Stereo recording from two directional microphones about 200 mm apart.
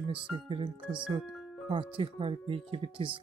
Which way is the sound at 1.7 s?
25° right (ahead or behind).